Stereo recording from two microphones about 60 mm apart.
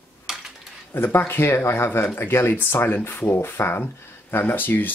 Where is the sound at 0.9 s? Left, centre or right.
Left.